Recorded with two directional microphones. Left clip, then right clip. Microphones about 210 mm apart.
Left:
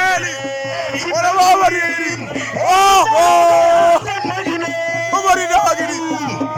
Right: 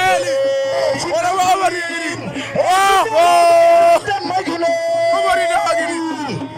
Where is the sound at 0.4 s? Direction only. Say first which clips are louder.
Right 6 dB; 30° right (ahead or behind).